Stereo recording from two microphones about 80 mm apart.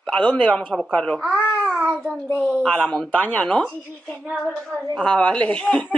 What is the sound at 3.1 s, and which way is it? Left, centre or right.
Speech, centre.